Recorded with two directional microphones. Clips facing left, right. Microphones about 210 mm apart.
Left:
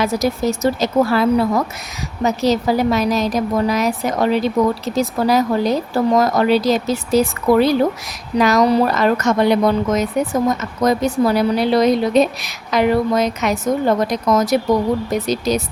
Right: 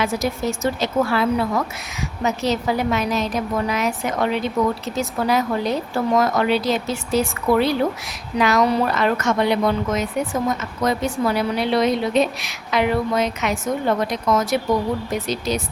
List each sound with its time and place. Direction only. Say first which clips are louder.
0.0 s a woman's voice: left 4 dB; 40° left (ahead or behind)